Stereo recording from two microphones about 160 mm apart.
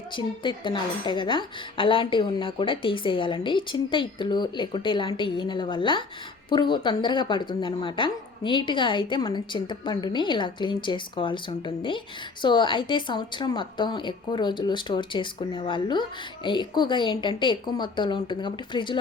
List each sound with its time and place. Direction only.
0.1 s a woman's voice: 30° left (ahead or behind)